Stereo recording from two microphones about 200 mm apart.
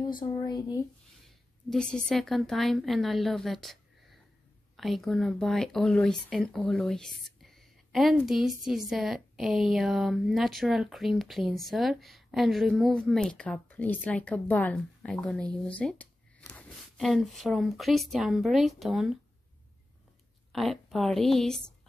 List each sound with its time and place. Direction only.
0.2 s speech: 20° left (ahead or behind)
1.2 s a woman's voice: centre (ahead or behind)
20.5 s speech: centre (ahead or behind)